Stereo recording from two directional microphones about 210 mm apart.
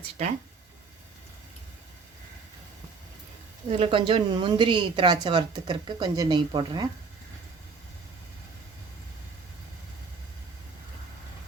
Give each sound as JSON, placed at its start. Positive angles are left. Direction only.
{"t": 3.7, "sound": "speech", "side_deg": -25}